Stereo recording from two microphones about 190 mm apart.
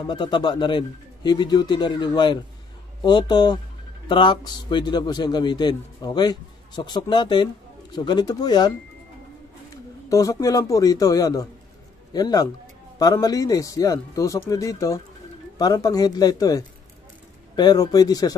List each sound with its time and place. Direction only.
0.0 s a man's voice: 25° left (ahead or behind)
10.0 s a man's voice: 15° left (ahead or behind)